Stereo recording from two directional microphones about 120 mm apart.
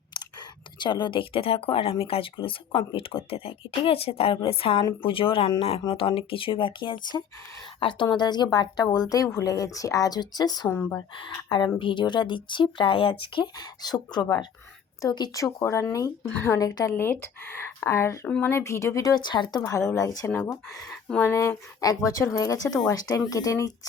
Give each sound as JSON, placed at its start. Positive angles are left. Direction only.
{"t": 0.8, "sound": "speech", "side_deg": 40}
{"t": 10.7, "sound": "speech", "side_deg": 20}
{"t": 10.9, "sound": "speech", "side_deg": 40}
{"t": 16.9, "sound": "speech", "side_deg": 15}
{"t": 18.3, "sound": "speech", "side_deg": 10}
{"t": 18.5, "sound": "speech", "side_deg": 25}
{"t": 19.6, "sound": "speech", "side_deg": 25}